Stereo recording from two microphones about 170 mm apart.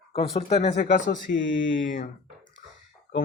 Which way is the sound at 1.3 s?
90° left.